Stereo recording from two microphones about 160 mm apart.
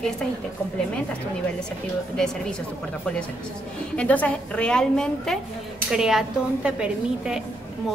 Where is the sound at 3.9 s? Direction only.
10° left (ahead or behind).